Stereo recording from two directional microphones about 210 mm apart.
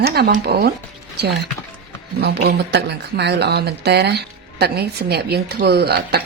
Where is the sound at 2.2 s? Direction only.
50° right (ahead or behind).